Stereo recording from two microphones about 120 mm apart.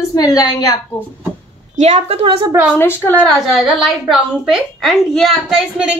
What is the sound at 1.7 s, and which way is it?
Speech, 65° right (ahead or behind).